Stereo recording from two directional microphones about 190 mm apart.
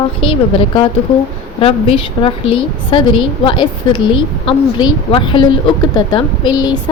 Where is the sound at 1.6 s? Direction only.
30° left (ahead or behind).